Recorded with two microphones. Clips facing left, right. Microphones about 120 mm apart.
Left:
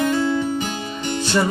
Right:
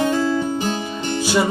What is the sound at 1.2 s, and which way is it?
Music, 5° right (ahead or behind).